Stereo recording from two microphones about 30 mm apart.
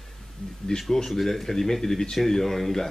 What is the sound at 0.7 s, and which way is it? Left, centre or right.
Speech, left.